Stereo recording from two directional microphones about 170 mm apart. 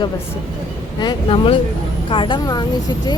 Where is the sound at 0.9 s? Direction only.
30° left (ahead or behind).